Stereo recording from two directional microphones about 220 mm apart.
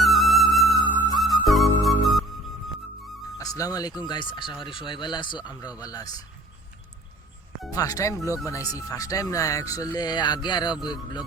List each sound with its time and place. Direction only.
0.0 s music: centre (ahead or behind)
3.3 s speech: 15° left (ahead or behind)
7.7 s speech: 15° left (ahead or behind)